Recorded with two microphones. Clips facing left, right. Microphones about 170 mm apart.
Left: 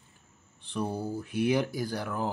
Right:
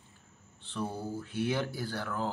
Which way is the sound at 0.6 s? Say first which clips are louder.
Left 4 dB; 15° left (ahead or behind).